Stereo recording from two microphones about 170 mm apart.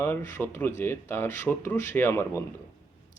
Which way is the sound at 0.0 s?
15° left (ahead or behind).